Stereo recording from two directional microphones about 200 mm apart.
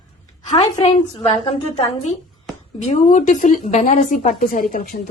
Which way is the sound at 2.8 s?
35° left (ahead or behind).